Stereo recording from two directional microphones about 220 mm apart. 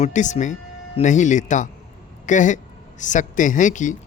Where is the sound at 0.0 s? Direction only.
35° left (ahead or behind).